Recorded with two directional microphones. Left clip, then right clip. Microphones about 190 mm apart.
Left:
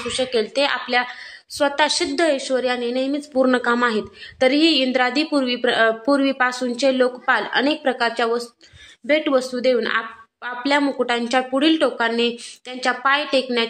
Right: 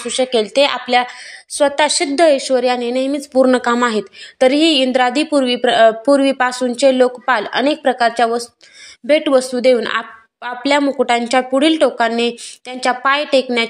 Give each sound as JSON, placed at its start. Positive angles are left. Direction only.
{"t": 0.1, "sound": "a woman's voice", "side_deg": -25}